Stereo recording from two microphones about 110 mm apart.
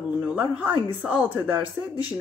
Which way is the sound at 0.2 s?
10° right (ahead or behind).